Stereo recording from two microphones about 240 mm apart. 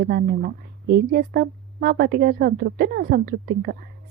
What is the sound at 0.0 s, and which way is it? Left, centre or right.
A woman's voice, right.